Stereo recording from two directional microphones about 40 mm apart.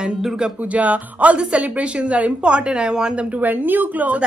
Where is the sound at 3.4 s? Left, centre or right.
Right.